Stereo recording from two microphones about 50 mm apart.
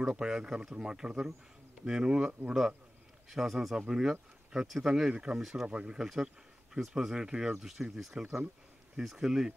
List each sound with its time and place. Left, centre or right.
0.0 s speech: centre
5.7 s speech: centre